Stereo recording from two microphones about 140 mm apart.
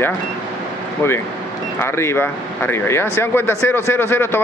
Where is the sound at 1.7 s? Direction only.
15° left (ahead or behind).